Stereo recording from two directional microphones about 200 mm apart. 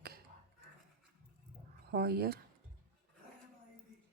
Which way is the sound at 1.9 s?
50° right (ahead or behind).